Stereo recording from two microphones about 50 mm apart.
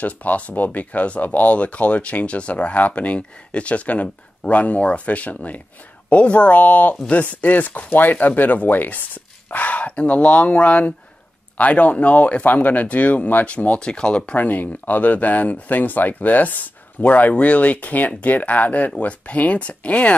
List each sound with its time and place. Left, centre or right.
0.0 s speech: left
13.7 s speech: centre
14.3 s speech: left